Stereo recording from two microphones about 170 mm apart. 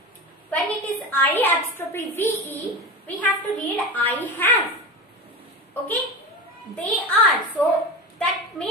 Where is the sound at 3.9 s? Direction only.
10° left (ahead or behind).